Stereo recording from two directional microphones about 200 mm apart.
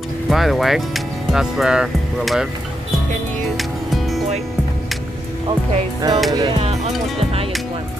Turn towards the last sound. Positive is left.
turn(degrees=-25)  # may be behind; listen again after turning